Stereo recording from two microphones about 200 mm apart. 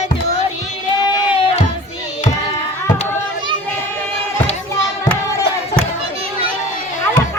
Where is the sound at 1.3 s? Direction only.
30° left (ahead or behind).